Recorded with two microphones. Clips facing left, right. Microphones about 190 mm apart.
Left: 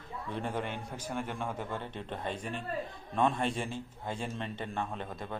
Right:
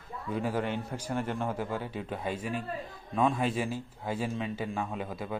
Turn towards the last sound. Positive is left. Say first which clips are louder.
# right 4 dB
turn(degrees=-5)  # may be behind; listen again after turning